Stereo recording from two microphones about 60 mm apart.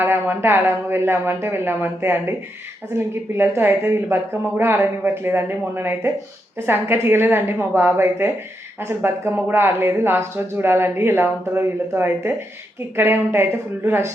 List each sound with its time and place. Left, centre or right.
0.0 s speech: right
3.3 s speech: right